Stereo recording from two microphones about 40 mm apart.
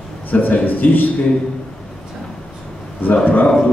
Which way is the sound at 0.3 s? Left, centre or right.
Left.